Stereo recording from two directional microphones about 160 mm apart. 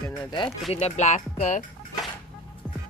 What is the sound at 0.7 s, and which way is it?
Speech, 45° left (ahead or behind).